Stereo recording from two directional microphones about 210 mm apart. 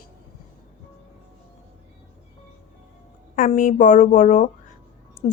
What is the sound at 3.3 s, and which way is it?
Speech, 40° left (ahead or behind).